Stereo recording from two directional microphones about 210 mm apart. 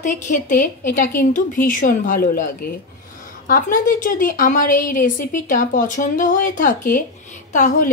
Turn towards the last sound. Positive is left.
turn(degrees=35)  # may be behind; listen again after turning